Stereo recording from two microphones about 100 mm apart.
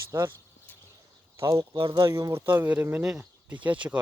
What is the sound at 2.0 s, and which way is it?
Speech, 35° right (ahead or behind).